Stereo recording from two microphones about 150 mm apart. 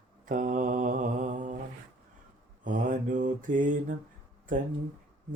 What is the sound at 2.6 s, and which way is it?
Mantra, 60° right (ahead or behind).